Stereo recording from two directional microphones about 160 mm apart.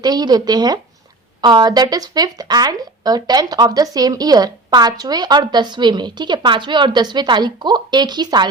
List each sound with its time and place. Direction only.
0.0 s speech: 25° right (ahead or behind)